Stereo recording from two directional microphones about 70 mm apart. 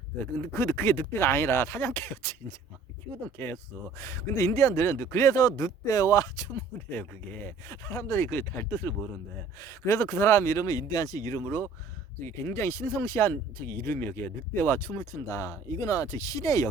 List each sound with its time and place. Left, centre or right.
0.4 s speech: left
6.9 s speech: left
7.7 s speech: left
9.6 s speech: left
10.7 s speech: left
12.5 s speech: left